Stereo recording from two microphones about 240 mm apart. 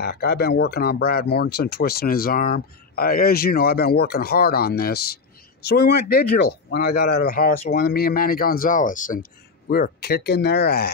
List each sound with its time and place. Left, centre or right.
0.0 s speech: left